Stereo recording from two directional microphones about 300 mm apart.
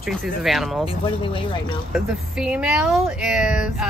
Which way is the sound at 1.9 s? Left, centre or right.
Centre.